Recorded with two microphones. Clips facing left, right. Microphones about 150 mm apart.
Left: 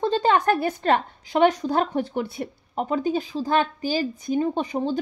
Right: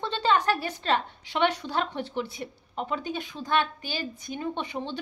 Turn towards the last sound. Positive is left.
turn(degrees=40)  # may be behind; listen again after turning